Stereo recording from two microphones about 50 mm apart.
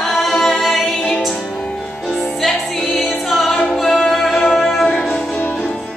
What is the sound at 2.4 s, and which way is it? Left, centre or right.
Music, centre.